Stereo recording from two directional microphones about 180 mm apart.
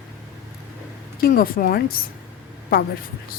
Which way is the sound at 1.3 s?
55° left (ahead or behind).